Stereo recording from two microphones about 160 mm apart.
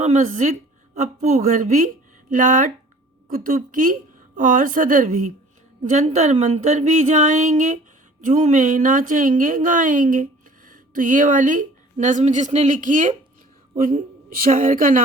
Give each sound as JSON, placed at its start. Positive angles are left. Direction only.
{"t": 0.0, "sound": "a woman's voice", "side_deg": -50}